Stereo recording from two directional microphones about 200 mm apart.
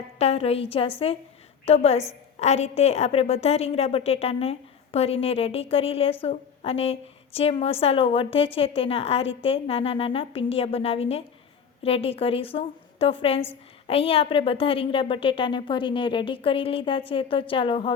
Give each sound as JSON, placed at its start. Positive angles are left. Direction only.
{"t": 0.2, "sound": "a woman's voice", "side_deg": 30}